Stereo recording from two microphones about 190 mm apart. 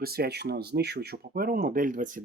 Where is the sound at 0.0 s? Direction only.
55° right (ahead or behind).